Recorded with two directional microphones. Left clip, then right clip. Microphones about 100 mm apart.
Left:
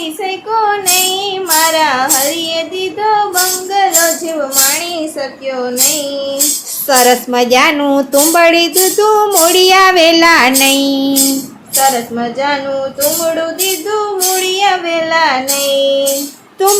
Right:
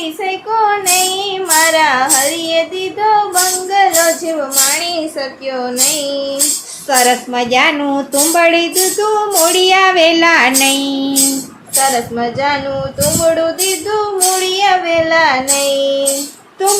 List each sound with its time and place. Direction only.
0.2 s child singing: 35° left (ahead or behind)
4.8 s a woman's voice: 30° left (ahead or behind)
5.5 s child singing: 30° left (ahead or behind)
6.8 s a woman's voice: 55° left (ahead or behind)
11.8 s child singing: 35° left (ahead or behind)